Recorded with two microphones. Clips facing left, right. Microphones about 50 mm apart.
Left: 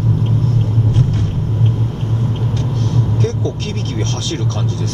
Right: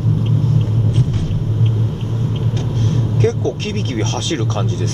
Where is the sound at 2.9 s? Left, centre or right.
Right.